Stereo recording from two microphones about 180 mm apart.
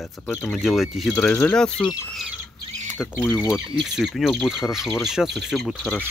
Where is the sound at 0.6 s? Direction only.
Centre (ahead or behind).